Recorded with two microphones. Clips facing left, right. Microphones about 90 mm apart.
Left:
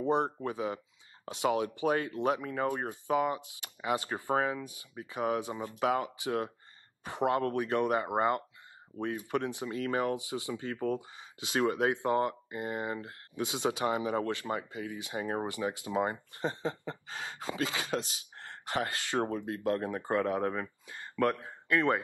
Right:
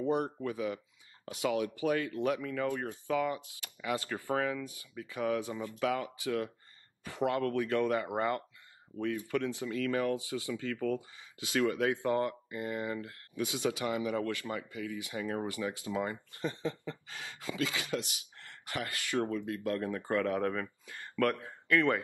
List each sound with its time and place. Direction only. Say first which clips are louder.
0.0 s speech: left 2 dB; 25° left (ahead or behind)